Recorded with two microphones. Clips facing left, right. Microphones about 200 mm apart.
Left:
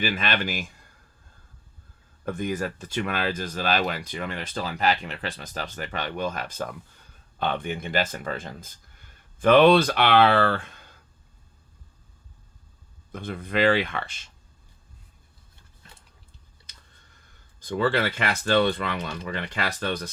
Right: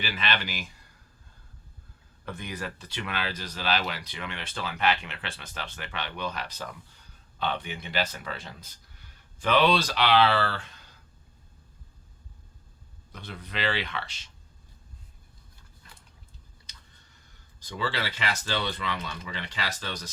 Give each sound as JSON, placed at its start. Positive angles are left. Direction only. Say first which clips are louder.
{"t": 0.0, "sound": "speech", "louder": "left 5 dB", "side_deg": 50}
{"t": 2.2, "sound": "speech", "louder": "left 8 dB", "side_deg": 45}
{"t": 13.1, "sound": "speech", "louder": "left 9 dB", "side_deg": 50}
{"t": 16.7, "sound": "a sound", "louder": "even", "side_deg": 55}
{"t": 17.6, "sound": "speech", "louder": "left 8 dB", "side_deg": 55}